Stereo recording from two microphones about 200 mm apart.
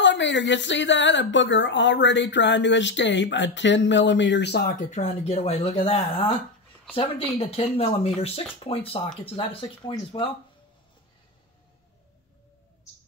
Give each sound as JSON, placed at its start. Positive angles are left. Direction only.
{"t": 0.0, "sound": "a woman's voice", "side_deg": 65}